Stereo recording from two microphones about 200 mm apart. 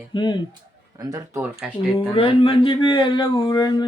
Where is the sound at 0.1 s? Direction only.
20° left (ahead or behind).